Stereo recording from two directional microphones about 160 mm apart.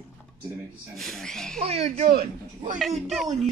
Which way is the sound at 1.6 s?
40° right (ahead or behind).